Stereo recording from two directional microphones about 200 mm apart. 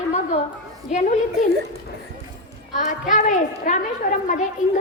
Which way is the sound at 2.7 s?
40° left (ahead or behind).